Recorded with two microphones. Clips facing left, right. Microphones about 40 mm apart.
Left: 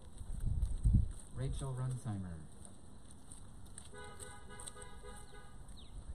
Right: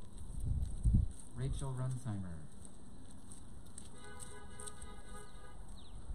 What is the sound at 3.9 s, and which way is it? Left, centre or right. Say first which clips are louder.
Vehicle: left 4 dB; left.